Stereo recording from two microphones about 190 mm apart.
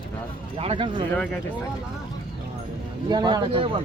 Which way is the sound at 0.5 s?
30° right (ahead or behind).